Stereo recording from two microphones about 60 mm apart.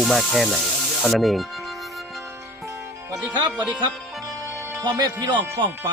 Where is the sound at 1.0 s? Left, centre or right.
Centre.